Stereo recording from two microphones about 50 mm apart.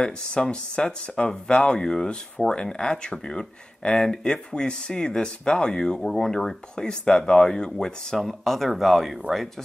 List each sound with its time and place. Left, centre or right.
0.0 s speech: centre
5.9 s speech: centre
8.2 s speech: centre